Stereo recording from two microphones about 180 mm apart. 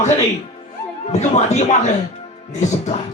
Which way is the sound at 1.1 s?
40° left (ahead or behind).